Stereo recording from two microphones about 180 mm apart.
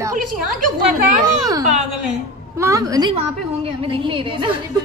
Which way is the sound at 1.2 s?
20° right (ahead or behind).